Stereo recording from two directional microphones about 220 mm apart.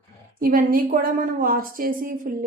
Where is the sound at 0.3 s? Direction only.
40° right (ahead or behind).